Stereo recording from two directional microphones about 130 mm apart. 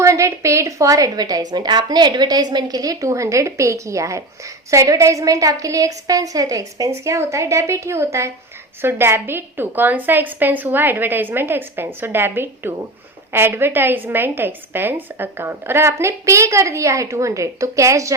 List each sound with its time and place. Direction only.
0.0 s a woman's voice: 25° right (ahead or behind)